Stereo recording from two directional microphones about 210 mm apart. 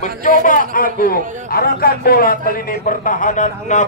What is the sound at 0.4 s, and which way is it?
A man's voice, 40° left (ahead or behind).